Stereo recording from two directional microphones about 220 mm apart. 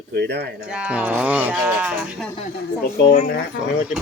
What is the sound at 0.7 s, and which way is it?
Speech, 5° right (ahead or behind).